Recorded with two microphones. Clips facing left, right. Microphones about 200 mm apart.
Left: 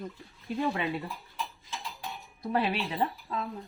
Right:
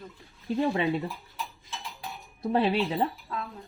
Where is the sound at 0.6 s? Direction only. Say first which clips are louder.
Right 4 dB; 25° right (ahead or behind).